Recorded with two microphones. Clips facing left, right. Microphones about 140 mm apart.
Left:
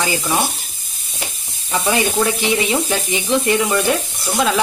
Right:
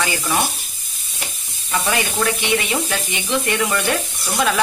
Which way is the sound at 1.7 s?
15° left (ahead or behind).